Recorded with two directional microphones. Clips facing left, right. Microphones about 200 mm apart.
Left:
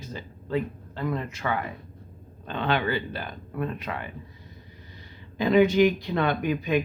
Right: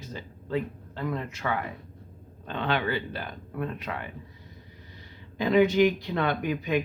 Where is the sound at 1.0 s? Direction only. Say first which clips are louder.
Left 2 dB; 20° left (ahead or behind).